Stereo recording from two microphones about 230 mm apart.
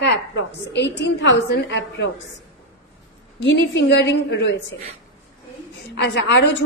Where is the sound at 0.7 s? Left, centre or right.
Left.